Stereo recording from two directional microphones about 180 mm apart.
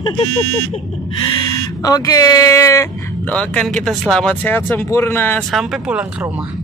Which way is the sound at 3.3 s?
5° left (ahead or behind).